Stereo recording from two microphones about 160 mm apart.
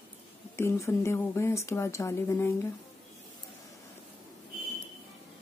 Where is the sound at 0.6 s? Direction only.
15° left (ahead or behind).